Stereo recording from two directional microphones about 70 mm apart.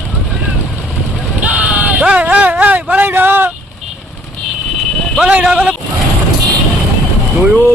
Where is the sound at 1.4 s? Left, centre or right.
Right.